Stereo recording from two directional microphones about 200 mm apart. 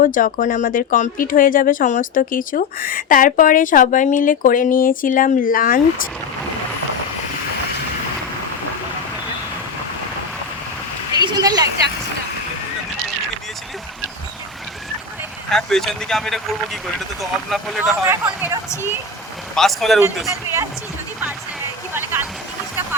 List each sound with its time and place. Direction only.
0.0 s speech: 40° left (ahead or behind)
11.1 s a sound: 20° right (ahead or behind)
15.4 s speech: centre (ahead or behind)
18.1 s speech: 10° right (ahead or behind)
19.5 s speech: centre (ahead or behind)
20.2 s speech: 15° right (ahead or behind)
21.9 s a sound: 10° right (ahead or behind)